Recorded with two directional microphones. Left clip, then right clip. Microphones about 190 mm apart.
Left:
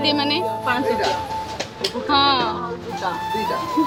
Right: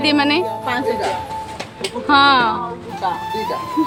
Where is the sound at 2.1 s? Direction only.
35° right (ahead or behind).